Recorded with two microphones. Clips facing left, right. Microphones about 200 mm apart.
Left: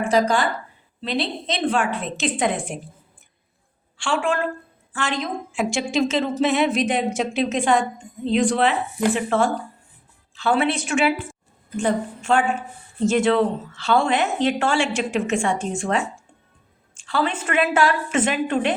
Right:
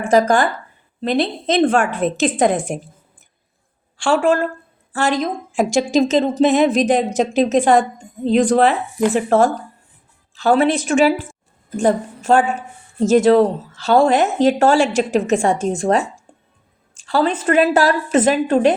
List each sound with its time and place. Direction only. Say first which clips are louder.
0.0 s a woman's voice: right 5 dB; 50° right (ahead or behind)
3.9 s a woman's voice: right 7 dB; 40° right (ahead or behind)